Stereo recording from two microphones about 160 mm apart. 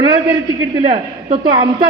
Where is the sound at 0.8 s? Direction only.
50° right (ahead or behind).